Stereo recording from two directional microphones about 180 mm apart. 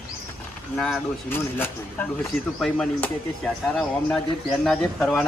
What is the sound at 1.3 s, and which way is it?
A man's voice, 10° left (ahead or behind).